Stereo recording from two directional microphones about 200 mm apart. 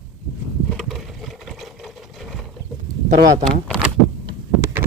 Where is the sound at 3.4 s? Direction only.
Centre (ahead or behind).